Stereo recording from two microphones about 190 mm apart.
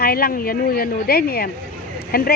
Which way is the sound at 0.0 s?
50° left (ahead or behind).